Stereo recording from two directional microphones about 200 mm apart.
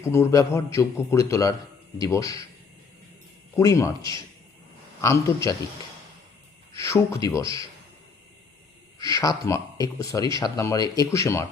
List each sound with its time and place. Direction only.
0.0 s speech: 15° left (ahead or behind)
3.5 s speech: 15° left (ahead or behind)
6.7 s speech: 15° left (ahead or behind)
9.0 s speech: 15° left (ahead or behind)